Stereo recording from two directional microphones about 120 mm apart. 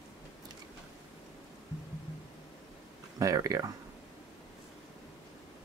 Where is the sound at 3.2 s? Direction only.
30° right (ahead or behind).